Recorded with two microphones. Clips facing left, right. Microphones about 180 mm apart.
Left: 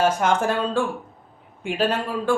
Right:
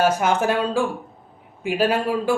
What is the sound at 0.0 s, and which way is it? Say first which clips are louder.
A man's voice: right 1 dB; 5° right (ahead or behind).